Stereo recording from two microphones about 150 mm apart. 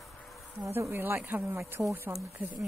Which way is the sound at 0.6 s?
15° right (ahead or behind).